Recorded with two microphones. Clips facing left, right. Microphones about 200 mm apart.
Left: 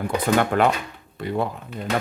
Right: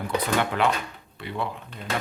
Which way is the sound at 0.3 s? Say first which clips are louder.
Left 5 dB; 50° left (ahead or behind).